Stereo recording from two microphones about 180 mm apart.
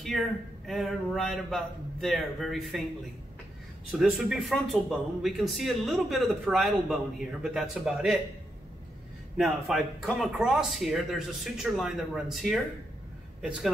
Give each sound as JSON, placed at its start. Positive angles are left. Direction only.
{"t": 0.1, "sound": "speech", "side_deg": 0}
{"t": 4.0, "sound": "speech", "side_deg": 0}
{"t": 9.4, "sound": "speech", "side_deg": 0}